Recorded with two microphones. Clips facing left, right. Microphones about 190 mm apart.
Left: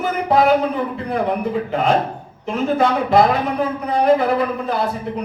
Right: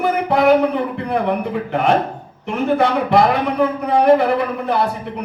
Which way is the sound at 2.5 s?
60° right (ahead or behind).